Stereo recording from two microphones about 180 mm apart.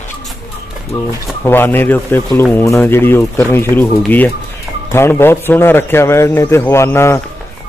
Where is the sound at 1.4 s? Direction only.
10° left (ahead or behind).